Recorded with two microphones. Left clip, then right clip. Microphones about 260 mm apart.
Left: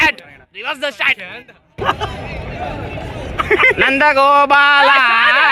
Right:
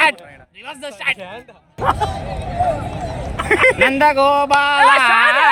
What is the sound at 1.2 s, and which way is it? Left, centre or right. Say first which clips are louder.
Speech: left 2 dB; right.